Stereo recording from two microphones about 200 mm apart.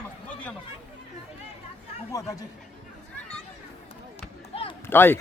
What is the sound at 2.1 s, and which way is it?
Speech, 15° left (ahead or behind).